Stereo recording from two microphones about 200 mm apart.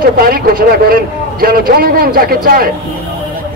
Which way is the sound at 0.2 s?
45° right (ahead or behind).